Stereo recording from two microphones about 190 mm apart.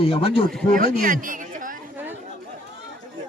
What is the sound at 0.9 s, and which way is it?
Speech, 45° right (ahead or behind).